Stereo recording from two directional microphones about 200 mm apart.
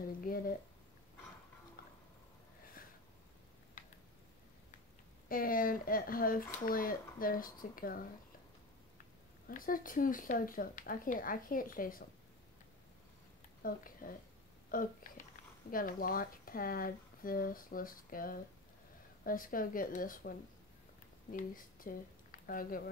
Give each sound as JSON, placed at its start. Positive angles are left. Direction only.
{"t": 0.2, "sound": "speech", "side_deg": 45}
{"t": 1.8, "sound": "tick-tock", "side_deg": 50}
{"t": 3.8, "sound": "a sound", "side_deg": 40}
{"t": 5.3, "sound": "speech", "side_deg": 45}
{"t": 9.5, "sound": "speech", "side_deg": 45}
{"t": 13.6, "sound": "speech", "side_deg": 45}